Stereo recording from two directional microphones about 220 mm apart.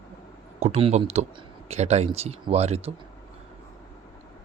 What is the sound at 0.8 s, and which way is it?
Speech, 30° right (ahead or behind).